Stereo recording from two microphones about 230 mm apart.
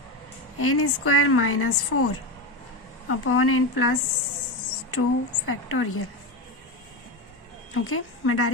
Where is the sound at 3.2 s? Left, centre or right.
Left.